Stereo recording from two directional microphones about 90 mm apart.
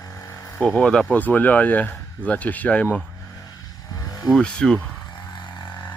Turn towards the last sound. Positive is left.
turn(degrees=10)  # may be behind; listen again after turning